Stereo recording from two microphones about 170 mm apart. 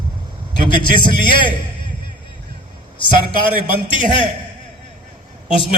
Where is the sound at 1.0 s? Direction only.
30° left (ahead or behind).